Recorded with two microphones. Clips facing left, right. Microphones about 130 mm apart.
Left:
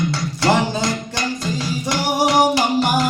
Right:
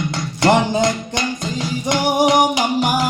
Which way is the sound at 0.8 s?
20° right (ahead or behind).